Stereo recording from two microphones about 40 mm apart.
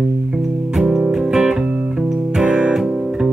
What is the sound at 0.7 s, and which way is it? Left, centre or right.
Music, centre.